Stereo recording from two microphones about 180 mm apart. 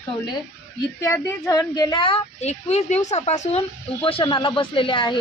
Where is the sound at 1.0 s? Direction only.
15° left (ahead or behind).